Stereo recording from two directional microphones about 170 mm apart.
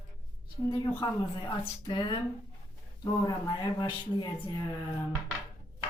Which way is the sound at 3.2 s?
25° left (ahead or behind).